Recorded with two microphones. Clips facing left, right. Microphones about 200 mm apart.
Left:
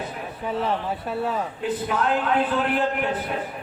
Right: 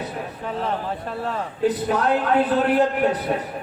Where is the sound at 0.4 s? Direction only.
5° left (ahead or behind).